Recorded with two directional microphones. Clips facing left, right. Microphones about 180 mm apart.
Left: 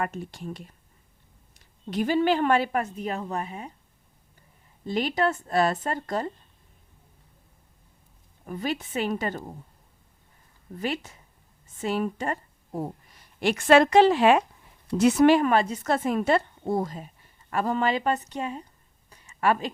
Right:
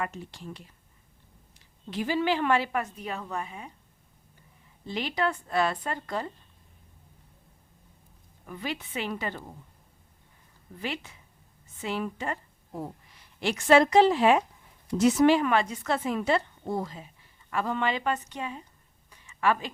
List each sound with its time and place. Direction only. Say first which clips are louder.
0.0 s a woman's voice: left 4 dB; 50° left (ahead or behind)
2.0 s a woman's voice: left 3 dB; 50° left (ahead or behind)
4.9 s a woman's voice: left 4 dB; 45° left (ahead or behind)
8.4 s a woman's voice: left 5 dB; 45° left (ahead or behind)
10.8 s a woman's voice: left 5 dB; 45° left (ahead or behind)
15.4 s a woman's voice: left 3 dB; 40° left (ahead or behind)
19.1 s a sound: left 2 dB; 40° left (ahead or behind)